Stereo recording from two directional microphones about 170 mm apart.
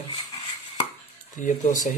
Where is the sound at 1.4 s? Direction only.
45° left (ahead or behind).